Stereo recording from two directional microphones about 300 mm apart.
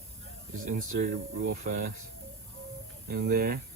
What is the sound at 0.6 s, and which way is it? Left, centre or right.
Speech, right.